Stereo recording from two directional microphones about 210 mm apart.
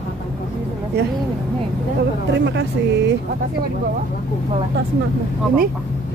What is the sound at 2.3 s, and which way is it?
Speech, 55° right (ahead or behind).